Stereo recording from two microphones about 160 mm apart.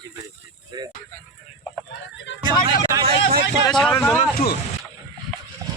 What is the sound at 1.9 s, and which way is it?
Fowl, 90° left.